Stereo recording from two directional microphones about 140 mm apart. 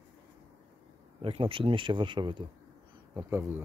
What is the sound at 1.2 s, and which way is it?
Speech, 40° right (ahead or behind).